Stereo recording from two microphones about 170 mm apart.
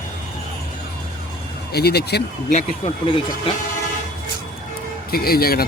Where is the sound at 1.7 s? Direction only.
70° left (ahead or behind).